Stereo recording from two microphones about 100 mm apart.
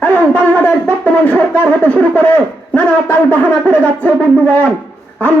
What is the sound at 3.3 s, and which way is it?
A man's voice, 15° left (ahead or behind).